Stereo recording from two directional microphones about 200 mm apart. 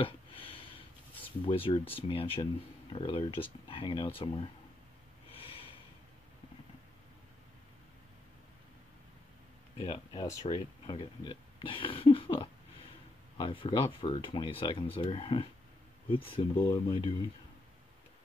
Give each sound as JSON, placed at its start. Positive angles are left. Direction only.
{"t": 0.0, "sound": "a sound", "side_deg": 25}
{"t": 2.9, "sound": "speech", "side_deg": 25}
{"t": 5.3, "sound": "snort", "side_deg": 25}
{"t": 9.8, "sound": "speech", "side_deg": 20}